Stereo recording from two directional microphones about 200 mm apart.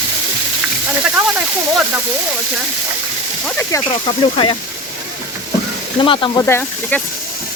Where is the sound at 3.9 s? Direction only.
25° left (ahead or behind).